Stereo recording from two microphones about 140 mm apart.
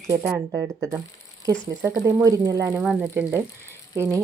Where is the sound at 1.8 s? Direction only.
20° right (ahead or behind).